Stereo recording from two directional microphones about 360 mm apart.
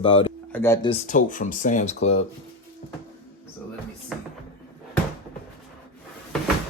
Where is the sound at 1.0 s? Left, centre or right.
Left.